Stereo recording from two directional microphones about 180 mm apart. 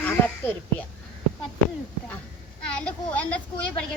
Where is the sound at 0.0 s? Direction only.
10° left (ahead or behind).